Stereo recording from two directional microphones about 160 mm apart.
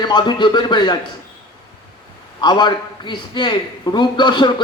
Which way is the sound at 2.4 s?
25° left (ahead or behind).